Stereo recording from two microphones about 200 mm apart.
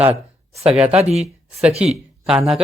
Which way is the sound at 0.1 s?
30° right (ahead or behind).